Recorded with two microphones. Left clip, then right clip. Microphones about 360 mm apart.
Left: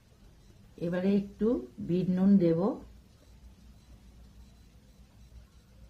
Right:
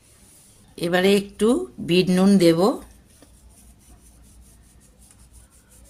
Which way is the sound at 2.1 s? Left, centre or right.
Left.